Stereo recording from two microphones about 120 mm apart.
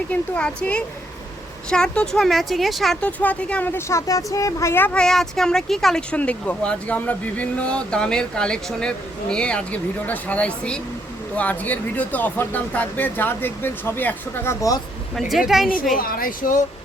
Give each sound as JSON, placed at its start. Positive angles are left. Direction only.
{"t": 0.1, "sound": "speech", "side_deg": 10}
{"t": 4.9, "sound": "speech", "side_deg": 5}
{"t": 15.1, "sound": "a woman's voice", "side_deg": 0}